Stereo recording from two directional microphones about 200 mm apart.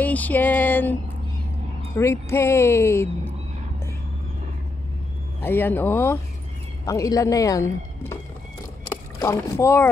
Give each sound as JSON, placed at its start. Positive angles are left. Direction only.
{"t": 0.0, "sound": "a sound", "side_deg": 10}
{"t": 2.0, "sound": "speech", "side_deg": 15}
{"t": 5.4, "sound": "speech", "side_deg": 10}
{"t": 8.8, "sound": "rowboat", "side_deg": 15}